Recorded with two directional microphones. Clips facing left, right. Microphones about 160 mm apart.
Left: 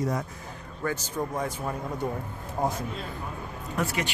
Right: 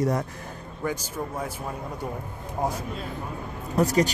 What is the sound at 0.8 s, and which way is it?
A man's voice, 10° right (ahead or behind).